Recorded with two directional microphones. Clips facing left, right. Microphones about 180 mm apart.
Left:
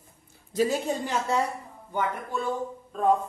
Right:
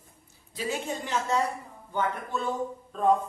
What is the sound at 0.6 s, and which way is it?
Speech, 40° left (ahead or behind).